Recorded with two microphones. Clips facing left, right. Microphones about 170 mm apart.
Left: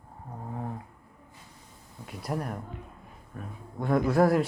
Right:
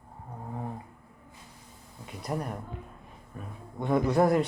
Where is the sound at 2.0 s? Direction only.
Centre (ahead or behind).